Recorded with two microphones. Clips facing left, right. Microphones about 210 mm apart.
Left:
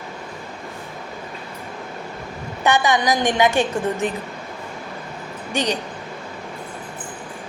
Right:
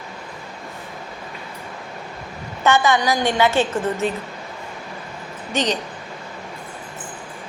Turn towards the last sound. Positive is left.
turn(degrees=10)  # may be behind; listen again after turning